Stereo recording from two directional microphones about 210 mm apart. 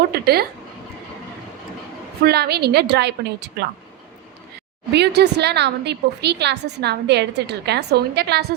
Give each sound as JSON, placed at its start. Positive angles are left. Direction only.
{"t": 0.1, "sound": "a woman's voice", "side_deg": -50}
{"t": 2.2, "sound": "a woman's voice", "side_deg": -50}
{"t": 4.9, "sound": "a woman's voice", "side_deg": -50}